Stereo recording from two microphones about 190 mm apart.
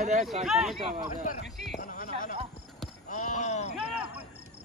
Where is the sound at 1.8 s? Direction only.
45° left (ahead or behind).